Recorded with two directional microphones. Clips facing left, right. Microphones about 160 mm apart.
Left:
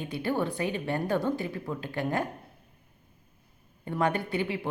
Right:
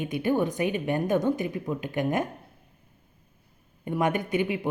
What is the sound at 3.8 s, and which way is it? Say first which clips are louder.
Speech: right 2 dB; 20° right (ahead or behind).